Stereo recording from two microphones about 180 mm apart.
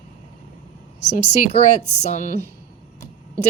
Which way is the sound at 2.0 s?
40° left (ahead or behind).